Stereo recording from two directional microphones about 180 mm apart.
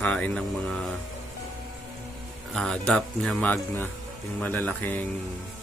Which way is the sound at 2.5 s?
5° left (ahead or behind).